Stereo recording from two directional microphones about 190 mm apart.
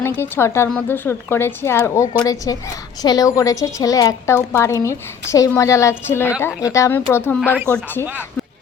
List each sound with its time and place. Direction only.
0.0 s a woman's voice: 15° left (ahead or behind)
8.0 s speech: 10° right (ahead or behind)